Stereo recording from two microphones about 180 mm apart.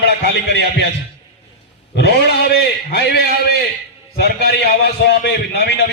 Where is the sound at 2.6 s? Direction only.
65° left (ahead or behind).